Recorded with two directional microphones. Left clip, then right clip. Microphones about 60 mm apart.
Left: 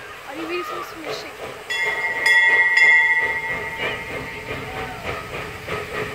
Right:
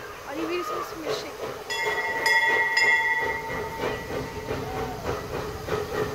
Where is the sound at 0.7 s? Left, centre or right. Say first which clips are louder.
Left 1 dB; left.